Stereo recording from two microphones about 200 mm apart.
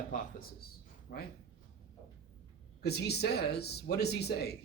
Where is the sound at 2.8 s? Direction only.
55° left (ahead or behind).